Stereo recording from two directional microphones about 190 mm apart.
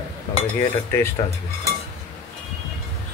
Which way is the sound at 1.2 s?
20° left (ahead or behind).